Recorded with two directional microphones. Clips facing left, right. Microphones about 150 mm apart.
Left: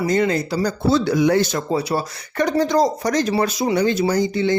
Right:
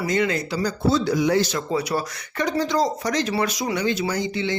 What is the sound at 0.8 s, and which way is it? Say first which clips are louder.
Speech: left 3 dB; 65° left (ahead or behind).